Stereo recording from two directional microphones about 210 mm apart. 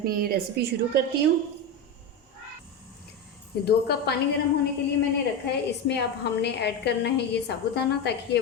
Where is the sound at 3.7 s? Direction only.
50° left (ahead or behind).